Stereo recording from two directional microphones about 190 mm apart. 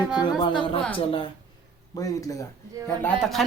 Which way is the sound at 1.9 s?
20° left (ahead or behind).